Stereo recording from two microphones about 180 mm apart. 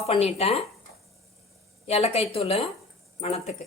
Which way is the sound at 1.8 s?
35° left (ahead or behind).